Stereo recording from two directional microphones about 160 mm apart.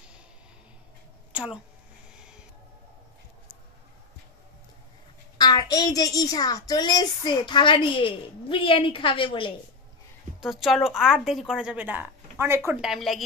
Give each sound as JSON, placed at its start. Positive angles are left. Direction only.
{"t": 1.3, "sound": "a sound", "side_deg": -10}
{"t": 5.4, "sound": "a child's voice", "side_deg": 25}
{"t": 10.4, "sound": "a woman's voice", "side_deg": 0}
{"t": 12.8, "sound": "a woman's voice", "side_deg": 0}